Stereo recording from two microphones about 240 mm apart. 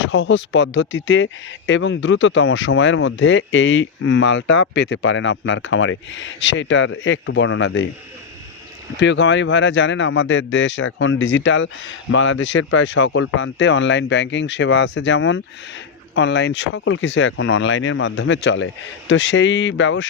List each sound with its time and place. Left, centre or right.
0.0 s speech: left
9.0 s speech: left